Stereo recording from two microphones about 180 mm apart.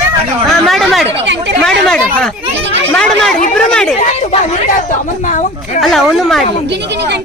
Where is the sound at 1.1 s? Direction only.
85° right.